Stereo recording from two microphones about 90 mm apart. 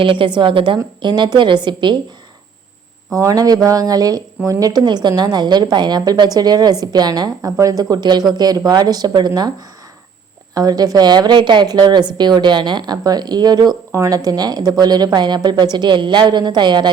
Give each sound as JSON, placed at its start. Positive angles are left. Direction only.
{"t": 0.0, "sound": "a woman's voice", "side_deg": -70}
{"t": 1.0, "sound": "a woman's voice", "side_deg": -55}
{"t": 3.2, "sound": "a woman's voice", "side_deg": -40}
{"t": 10.5, "sound": "a woman's voice", "side_deg": -45}
{"t": 13.9, "sound": "a woman's voice", "side_deg": -40}